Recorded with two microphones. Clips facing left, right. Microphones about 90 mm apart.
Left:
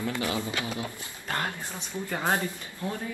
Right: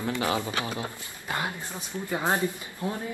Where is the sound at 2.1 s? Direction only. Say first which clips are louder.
Right 2 dB; 15° right (ahead or behind).